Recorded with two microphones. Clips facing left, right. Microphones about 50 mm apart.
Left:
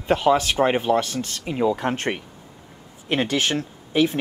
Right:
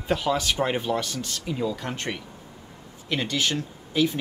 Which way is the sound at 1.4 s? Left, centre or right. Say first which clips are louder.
Left 8 dB; left.